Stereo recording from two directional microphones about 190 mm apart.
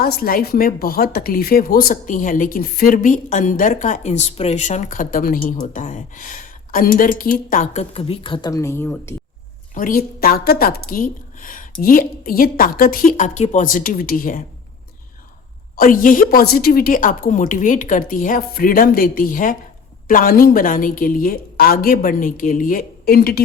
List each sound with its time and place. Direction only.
0.0 s speech: 50° left (ahead or behind); by 9.1 s 10° left (ahead or behind)
9.7 s speech: 50° left (ahead or behind)
15.7 s speech: 45° left (ahead or behind)